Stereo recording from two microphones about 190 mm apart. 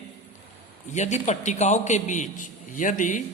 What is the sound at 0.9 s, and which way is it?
Speech, 40° left (ahead or behind).